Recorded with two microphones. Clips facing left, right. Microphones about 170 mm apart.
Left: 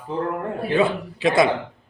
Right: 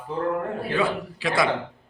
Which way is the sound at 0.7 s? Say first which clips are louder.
Left 6 dB; 20° left (ahead or behind).